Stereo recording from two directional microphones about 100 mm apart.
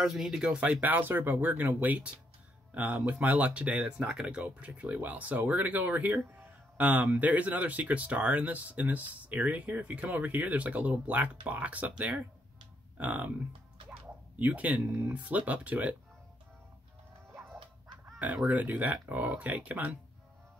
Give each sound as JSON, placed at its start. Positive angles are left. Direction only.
{"t": 0.0, "sound": "speech", "side_deg": -5}
{"t": 14.4, "sound": "speech", "side_deg": -15}
{"t": 18.2, "sound": "speech", "side_deg": -10}